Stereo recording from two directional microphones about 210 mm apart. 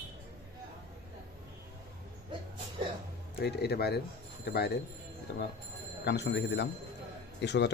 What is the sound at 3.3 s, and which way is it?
Speech, 50° left (ahead or behind).